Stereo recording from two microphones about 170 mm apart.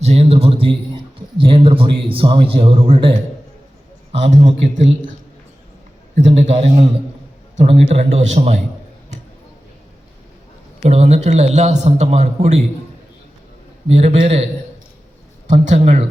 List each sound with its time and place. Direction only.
0.0 s a man's voice: 40° right (ahead or behind)
4.2 s a man's voice: 40° right (ahead or behind)
6.1 s a man's voice: 40° right (ahead or behind)
10.8 s a man's voice: 40° right (ahead or behind)
13.8 s a man's voice: 40° right (ahead or behind)
15.4 s a man's voice: 45° right (ahead or behind)